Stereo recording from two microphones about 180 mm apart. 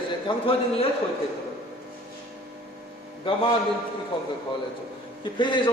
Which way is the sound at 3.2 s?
30° left (ahead or behind).